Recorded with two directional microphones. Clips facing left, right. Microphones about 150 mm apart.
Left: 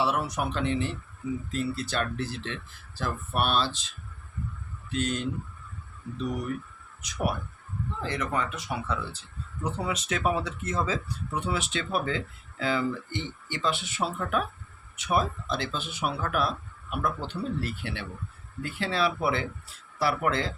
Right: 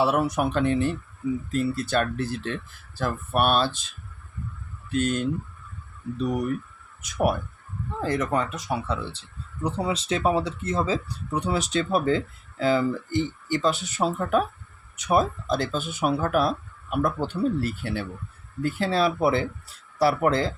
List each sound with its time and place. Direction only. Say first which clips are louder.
0.0 s speech: right 5 dB; 55° right (ahead or behind)
7.0 s speech: right 6 dB; 55° right (ahead or behind)
8.0 s speech: right 6 dB; 45° right (ahead or behind)